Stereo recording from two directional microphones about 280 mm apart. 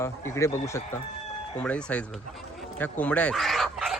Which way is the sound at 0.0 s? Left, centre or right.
Centre.